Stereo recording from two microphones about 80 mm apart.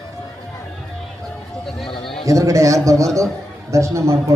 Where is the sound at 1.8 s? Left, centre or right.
Left.